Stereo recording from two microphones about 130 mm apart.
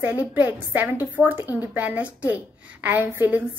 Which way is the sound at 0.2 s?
15° right (ahead or behind).